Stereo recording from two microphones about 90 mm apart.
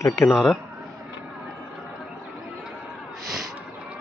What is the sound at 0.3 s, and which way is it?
Speech, 5° right (ahead or behind).